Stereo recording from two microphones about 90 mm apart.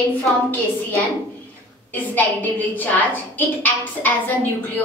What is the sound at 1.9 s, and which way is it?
A woman's voice, 20° left (ahead or behind).